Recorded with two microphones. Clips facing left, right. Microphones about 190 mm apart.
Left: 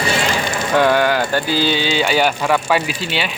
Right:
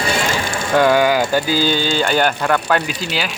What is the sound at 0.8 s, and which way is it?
Speech, 5° right (ahead or behind).